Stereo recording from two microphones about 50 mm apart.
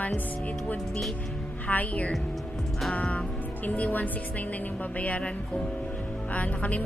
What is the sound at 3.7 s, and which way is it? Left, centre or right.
Speech, left.